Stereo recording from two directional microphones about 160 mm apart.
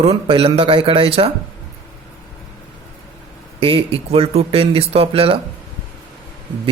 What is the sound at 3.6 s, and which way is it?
Speech, 35° right (ahead or behind).